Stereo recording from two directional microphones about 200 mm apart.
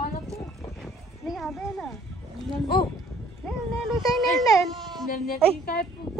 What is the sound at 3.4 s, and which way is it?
Speech, centre (ahead or behind).